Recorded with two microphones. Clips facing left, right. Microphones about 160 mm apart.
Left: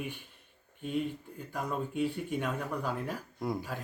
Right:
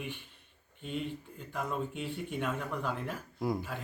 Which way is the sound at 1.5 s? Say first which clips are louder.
Left 1 dB; centre (ahead or behind).